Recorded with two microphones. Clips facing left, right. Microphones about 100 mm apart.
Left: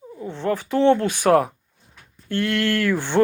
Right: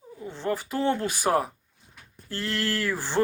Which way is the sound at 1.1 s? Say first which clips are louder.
Left 8 dB; 5° right (ahead or behind).